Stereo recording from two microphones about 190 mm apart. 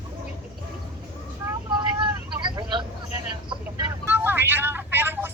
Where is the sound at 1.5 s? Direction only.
20° right (ahead or behind).